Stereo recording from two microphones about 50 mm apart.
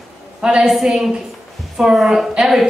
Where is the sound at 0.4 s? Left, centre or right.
Centre.